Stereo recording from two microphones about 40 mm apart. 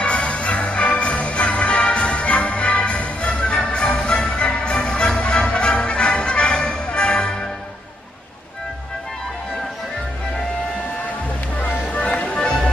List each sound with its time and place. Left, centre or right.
0.0 s music: left
11.5 s music: left